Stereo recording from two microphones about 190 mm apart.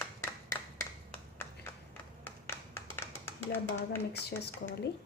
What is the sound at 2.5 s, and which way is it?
Clapping, 10° left (ahead or behind).